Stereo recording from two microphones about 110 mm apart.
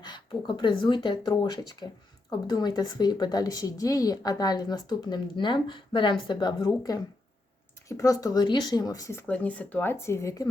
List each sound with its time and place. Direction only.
0.0 s a woman's voice: 45° left (ahead or behind)
9.2 s speech: 10° left (ahead or behind); by 10.5 s 30° left (ahead or behind)